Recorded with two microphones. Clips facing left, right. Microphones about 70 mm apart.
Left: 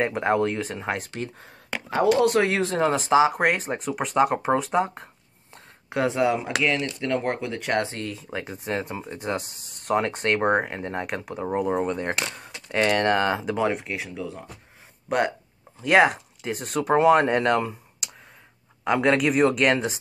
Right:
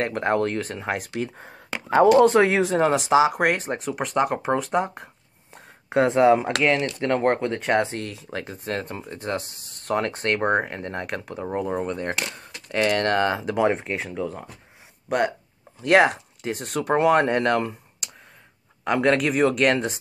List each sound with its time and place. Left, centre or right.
0.0 s speech: centre
1.4 s a sound: centre
2.0 s speech: right
2.8 s speech: centre
6.0 s speech: right
8.0 s speech: centre
13.7 s speech: right
15.0 s speech: centre